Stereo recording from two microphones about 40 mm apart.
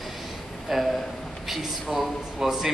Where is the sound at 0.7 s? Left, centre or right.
Centre.